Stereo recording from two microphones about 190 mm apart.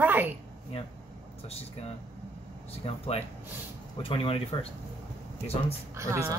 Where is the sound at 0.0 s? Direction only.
10° right (ahead or behind).